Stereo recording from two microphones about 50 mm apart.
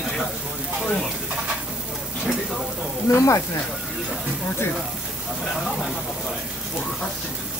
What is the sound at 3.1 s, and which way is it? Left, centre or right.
Speech, left.